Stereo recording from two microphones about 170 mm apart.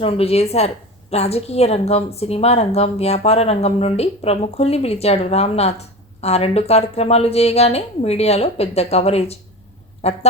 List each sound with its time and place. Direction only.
0.0 s a woman's voice: 35° left (ahead or behind)